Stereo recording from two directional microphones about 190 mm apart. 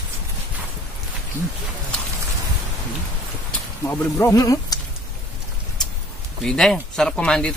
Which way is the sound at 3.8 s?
10° left (ahead or behind).